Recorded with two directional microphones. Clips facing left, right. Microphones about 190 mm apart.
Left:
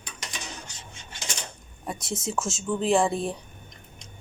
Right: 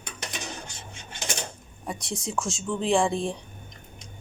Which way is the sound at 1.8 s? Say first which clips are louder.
Left 1 dB; centre (ahead or behind).